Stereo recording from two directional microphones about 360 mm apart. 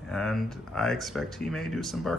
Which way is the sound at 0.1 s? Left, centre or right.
Centre.